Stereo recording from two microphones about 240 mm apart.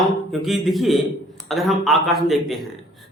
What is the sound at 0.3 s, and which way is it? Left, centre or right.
Speech, centre.